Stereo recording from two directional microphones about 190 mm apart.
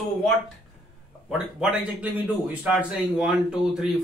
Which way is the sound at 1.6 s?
5° right (ahead or behind).